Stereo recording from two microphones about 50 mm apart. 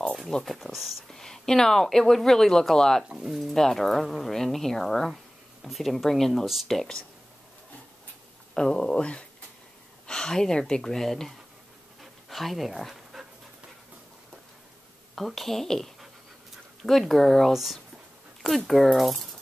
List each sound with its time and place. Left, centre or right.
0.3 s speech: centre
0.6 s speech: centre
1.0 s speech: centre
3.2 s speech: centre
6.7 s speech: centre
8.5 s speech: centre
10.0 s a sound: centre
10.7 s speech: centre
12.0 s pant: centre
15.1 s speech: centre
17.5 s speech: centre